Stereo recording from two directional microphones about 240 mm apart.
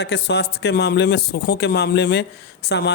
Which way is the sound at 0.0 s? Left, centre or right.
Left.